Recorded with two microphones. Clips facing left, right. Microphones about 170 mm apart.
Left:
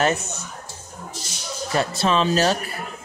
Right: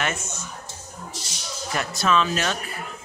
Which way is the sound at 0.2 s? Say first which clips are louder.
Left 2 dB; 65° left (ahead or behind).